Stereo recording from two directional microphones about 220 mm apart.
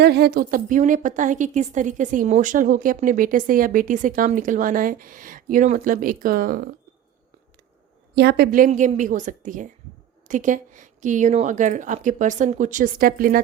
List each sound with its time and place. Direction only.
0.0 s a woman's voice: 45° right (ahead or behind)
8.1 s a woman's voice: 45° right (ahead or behind)